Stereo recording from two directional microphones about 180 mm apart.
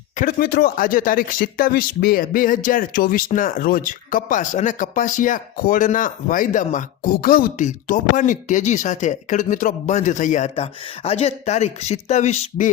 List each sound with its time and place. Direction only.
0.2 s speech: 55° left (ahead or behind)